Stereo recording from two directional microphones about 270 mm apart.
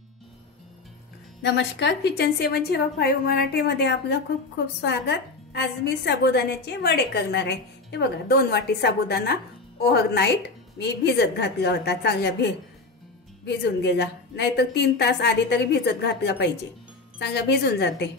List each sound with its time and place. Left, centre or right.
1.4 s a woman's voice: left
13.7 s a woman's voice: left